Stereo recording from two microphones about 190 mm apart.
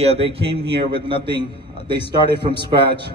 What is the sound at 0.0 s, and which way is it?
A man's voice, 30° right (ahead or behind).